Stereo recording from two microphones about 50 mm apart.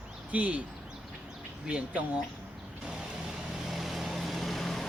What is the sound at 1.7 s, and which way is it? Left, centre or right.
Speech, right.